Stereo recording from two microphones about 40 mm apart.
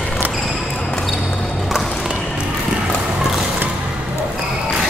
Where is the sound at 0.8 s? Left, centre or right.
Left.